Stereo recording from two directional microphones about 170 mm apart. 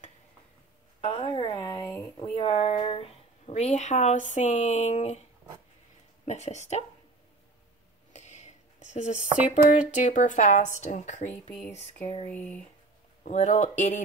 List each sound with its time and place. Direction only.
1.0 s a sound: 30° left (ahead or behind)
2.2 s speech: 35° left (ahead or behind)
6.2 s speech: 40° left (ahead or behind)
8.1 s a sound: 45° left (ahead or behind)
9.5 s a woman's voice: 50° left (ahead or behind)
12.0 s speech: 35° left (ahead or behind)
12.3 s speech: 10° left (ahead or behind)
13.2 s a woman's voice: 45° left (ahead or behind)